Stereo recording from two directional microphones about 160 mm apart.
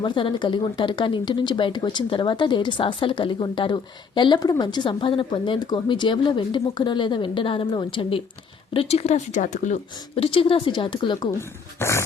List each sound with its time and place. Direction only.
0.0 s a woman's voice: 30° left (ahead or behind)
11.3 s speech: 15° left (ahead or behind)